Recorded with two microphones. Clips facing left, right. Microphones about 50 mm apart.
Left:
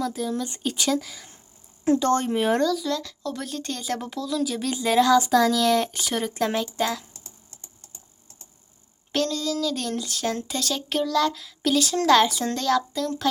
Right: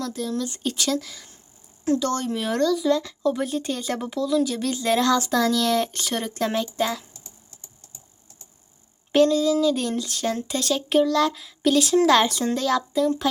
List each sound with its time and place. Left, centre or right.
0.0 s speech: centre
1.8 s speech: left
2.6 s speech: centre
2.9 s speech: centre
9.1 s speech: centre